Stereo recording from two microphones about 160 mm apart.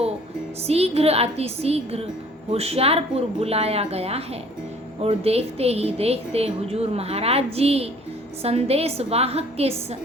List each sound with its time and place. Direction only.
0.7 s speech: 40° right (ahead or behind)